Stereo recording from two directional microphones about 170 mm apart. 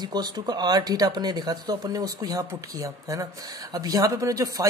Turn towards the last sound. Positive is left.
turn(degrees=-20)  # may be behind; listen again after turning